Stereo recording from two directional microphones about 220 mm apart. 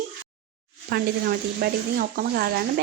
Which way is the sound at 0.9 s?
45° right (ahead or behind).